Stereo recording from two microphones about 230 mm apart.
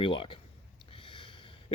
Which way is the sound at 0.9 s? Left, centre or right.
Left.